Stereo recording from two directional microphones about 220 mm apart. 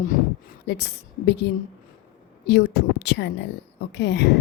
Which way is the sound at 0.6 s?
50° left (ahead or behind).